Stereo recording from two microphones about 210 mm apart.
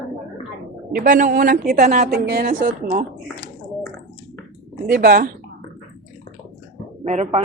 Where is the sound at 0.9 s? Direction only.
40° right (ahead or behind).